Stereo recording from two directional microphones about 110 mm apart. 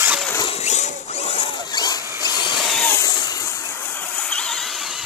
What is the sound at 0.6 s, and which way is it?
Rodents, 90° left.